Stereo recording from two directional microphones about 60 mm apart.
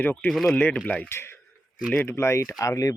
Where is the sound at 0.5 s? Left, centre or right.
Left.